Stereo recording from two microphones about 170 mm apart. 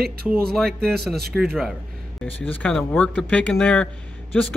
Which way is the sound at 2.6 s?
5° left (ahead or behind).